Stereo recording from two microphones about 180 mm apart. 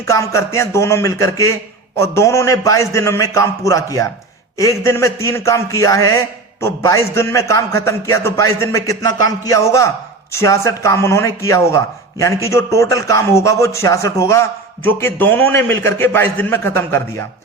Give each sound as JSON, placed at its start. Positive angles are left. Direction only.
{"t": 0.1, "sound": "a man's voice", "side_deg": 15}